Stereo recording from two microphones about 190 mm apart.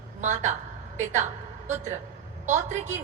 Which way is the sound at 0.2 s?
40° right (ahead or behind).